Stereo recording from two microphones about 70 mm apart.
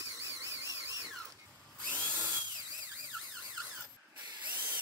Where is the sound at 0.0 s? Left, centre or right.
Right.